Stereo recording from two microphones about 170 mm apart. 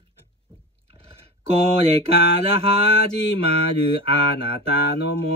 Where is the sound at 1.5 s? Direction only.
35° right (ahead or behind).